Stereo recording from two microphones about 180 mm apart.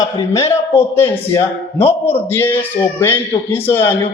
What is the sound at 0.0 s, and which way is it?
A man's voice, 20° left (ahead or behind).